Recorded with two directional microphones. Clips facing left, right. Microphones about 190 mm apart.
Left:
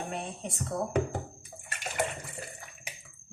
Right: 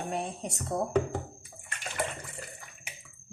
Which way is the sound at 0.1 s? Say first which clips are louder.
Right 3 dB; 40° right (ahead or behind).